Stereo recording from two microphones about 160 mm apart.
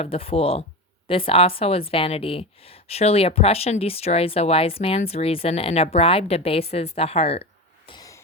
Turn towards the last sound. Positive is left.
turn(degrees=35)  # may be behind; listen again after turning